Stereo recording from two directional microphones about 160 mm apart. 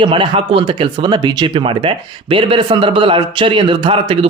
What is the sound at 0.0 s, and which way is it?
Speech, 30° right (ahead or behind).